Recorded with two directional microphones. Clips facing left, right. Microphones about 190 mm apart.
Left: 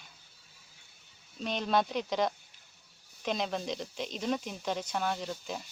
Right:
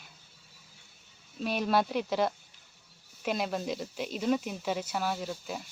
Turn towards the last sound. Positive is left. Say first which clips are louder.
# right 1 dB
turn(degrees=-5)  # may be behind; listen again after turning